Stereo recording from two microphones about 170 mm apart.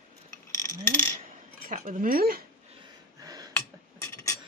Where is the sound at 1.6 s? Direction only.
50° right (ahead or behind).